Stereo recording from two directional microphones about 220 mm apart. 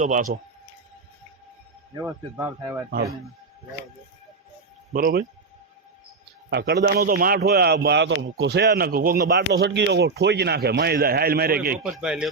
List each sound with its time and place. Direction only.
0.0 s speech: 35° right (ahead or behind)
2.0 s speech: 10° right (ahead or behind)
4.9 s speech: 40° right (ahead or behind)
6.5 s a man's voice: 50° right (ahead or behind)
11.9 s speech: 5° right (ahead or behind)